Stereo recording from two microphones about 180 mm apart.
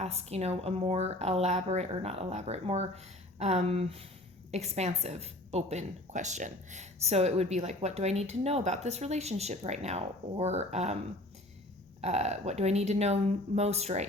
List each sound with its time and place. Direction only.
0.0 s a woman's voice: 35° right (ahead or behind)
12.0 s a woman's voice: 40° right (ahead or behind)